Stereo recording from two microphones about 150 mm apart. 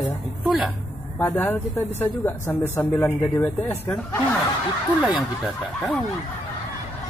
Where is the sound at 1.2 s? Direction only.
15° left (ahead or behind).